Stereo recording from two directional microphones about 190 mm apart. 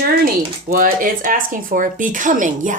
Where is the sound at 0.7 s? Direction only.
50° right (ahead or behind).